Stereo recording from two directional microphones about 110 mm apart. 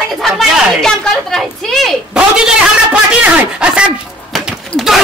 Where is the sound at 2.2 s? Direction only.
10° right (ahead or behind).